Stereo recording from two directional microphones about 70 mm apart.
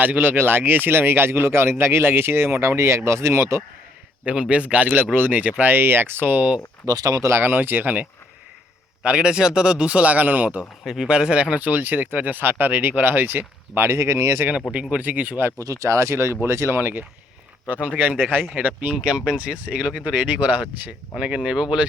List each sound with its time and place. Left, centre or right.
0.0 s speech: right
4.3 s speech: centre
6.8 s speech: right
7.2 s speech: right
7.4 s speech: right
9.0 s a man's voice: centre
10.8 s speech: centre; by 14.4 s right
14.7 s speech: centre
15.5 s speech: right
17.7 s a man's voice: right